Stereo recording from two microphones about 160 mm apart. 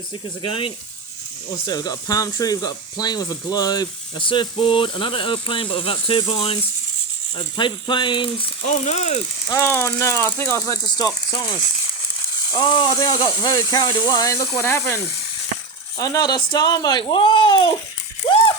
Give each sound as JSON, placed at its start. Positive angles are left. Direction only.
{"t": 0.4, "sound": "speech", "side_deg": 35}
{"t": 8.6, "sound": "speech", "side_deg": 45}
{"t": 9.5, "sound": "speech", "side_deg": 15}
{"t": 12.5, "sound": "speech", "side_deg": 30}
{"t": 18.2, "sound": "a sound", "side_deg": 40}